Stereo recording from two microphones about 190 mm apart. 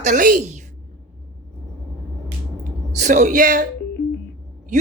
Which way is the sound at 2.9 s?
40° right (ahead or behind).